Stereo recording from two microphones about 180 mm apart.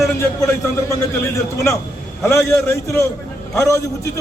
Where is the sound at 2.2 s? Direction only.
15° left (ahead or behind).